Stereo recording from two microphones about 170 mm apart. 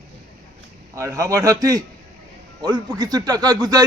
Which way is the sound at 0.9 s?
20° right (ahead or behind).